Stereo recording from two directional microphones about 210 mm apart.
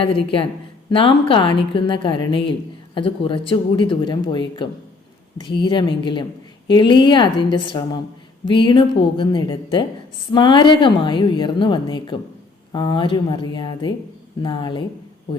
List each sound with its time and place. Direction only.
0.0 s a woman's voice: 25° left (ahead or behind)